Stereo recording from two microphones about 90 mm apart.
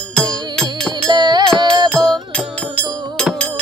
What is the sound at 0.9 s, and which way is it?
Music, 50° right (ahead or behind).